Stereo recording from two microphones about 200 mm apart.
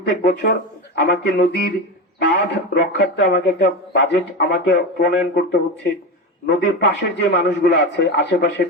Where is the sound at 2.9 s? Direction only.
60° left (ahead or behind).